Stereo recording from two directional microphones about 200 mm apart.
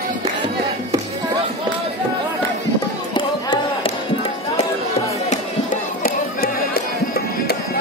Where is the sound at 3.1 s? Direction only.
25° left (ahead or behind).